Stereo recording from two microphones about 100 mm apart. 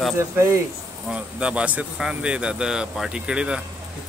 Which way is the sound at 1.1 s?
10° right (ahead or behind).